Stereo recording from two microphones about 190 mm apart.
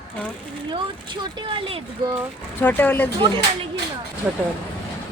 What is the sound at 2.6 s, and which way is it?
Speech, 10° left (ahead or behind).